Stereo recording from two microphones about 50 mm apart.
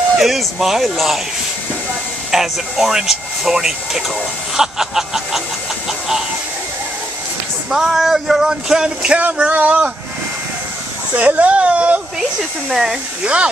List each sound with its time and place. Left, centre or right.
0.2 s speech: centre
2.3 s speech: centre
5.9 s a sound: centre
7.7 s speech: centre
9.5 s speech: right
11.1 s speech: right
12.2 s speech: centre
13.2 s speech: right